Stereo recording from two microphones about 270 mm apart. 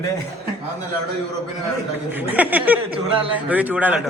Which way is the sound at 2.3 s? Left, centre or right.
Centre.